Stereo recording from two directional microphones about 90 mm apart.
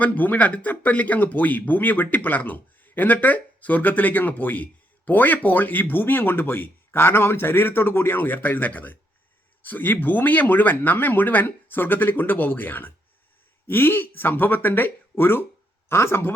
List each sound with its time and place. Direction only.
0.0 s speech: 20° left (ahead or behind)